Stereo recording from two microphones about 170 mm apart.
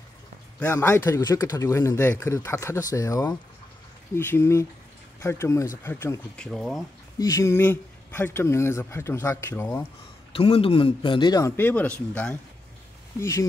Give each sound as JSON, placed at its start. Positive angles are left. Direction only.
{"t": 0.7, "sound": "speech", "side_deg": 15}
{"t": 6.3, "sound": "speech", "side_deg": 5}
{"t": 7.2, "sound": "speech", "side_deg": 20}
{"t": 10.3, "sound": "speech", "side_deg": 35}
{"t": 13.2, "sound": "speech", "side_deg": 20}